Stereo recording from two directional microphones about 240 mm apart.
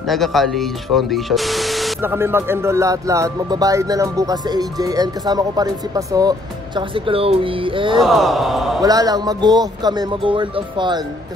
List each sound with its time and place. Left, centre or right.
0.1 s speech: centre; by 8.0 s right
8.0 s a sound: centre
8.8 s speech: centre